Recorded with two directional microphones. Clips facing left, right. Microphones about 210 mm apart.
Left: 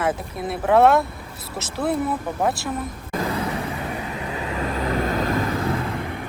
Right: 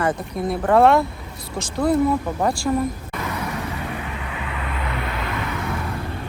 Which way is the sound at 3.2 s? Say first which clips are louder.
Left 6 dB; 30° left (ahead or behind).